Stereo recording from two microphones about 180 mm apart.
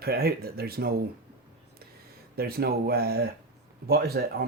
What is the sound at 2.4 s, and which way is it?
Speech, 60° right (ahead or behind).